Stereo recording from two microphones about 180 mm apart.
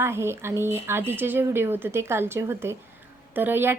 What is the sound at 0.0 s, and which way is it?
A woman's voice, 15° right (ahead or behind).